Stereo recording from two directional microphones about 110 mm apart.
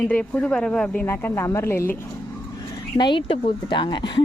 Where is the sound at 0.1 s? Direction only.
15° left (ahead or behind).